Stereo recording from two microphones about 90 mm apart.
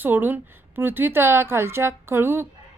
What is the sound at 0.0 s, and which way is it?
A woman's voice, 20° right (ahead or behind).